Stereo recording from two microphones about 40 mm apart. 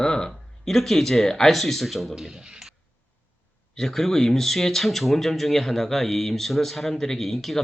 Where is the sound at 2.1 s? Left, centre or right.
Right.